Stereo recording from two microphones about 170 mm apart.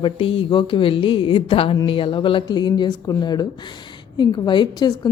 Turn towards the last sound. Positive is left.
turn(degrees=25)  # may be behind; listen again after turning